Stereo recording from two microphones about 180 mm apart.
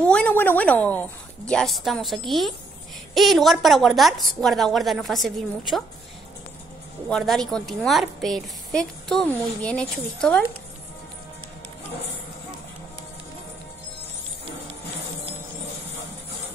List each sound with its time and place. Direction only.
0.0 s a woman's voice: 5° left (ahead or behind)
7.1 s a woman's voice: centre (ahead or behind)